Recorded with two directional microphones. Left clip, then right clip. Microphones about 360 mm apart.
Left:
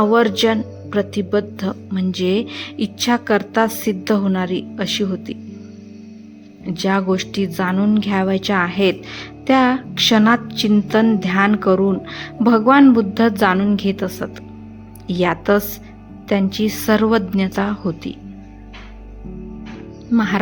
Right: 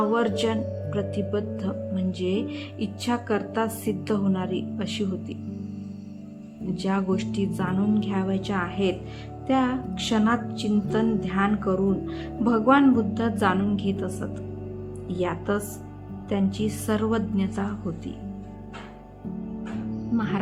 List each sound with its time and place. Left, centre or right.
0.0 s speech: centre
6.7 s a woman's voice: centre
20.1 s a woman's voice: centre